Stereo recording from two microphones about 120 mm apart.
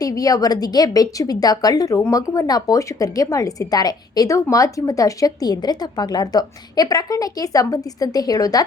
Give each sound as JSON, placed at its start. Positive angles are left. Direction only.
{"t": 0.0, "sound": "a woman's voice", "side_deg": 30}